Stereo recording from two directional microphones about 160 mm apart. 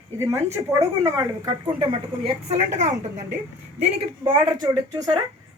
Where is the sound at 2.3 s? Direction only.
45° right (ahead or behind).